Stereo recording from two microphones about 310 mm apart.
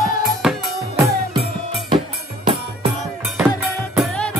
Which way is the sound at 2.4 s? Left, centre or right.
Centre.